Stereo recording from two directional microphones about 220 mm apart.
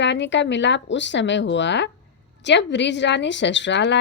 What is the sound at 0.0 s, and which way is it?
A woman's voice, 55° left (ahead or behind).